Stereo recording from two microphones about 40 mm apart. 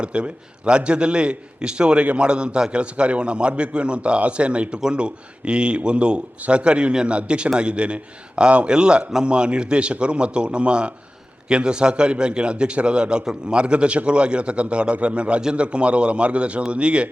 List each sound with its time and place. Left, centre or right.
0.0 s speech: right
15.4 s a man's voice: centre
15.6 s speech: right